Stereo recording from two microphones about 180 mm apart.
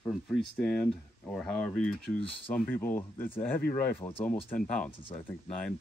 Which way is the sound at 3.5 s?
50° left (ahead or behind).